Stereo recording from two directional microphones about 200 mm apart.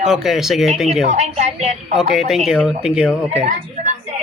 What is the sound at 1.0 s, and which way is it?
Speech, 35° right (ahead or behind).